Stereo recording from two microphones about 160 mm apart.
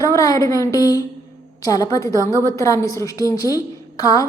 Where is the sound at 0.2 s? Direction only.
20° left (ahead or behind).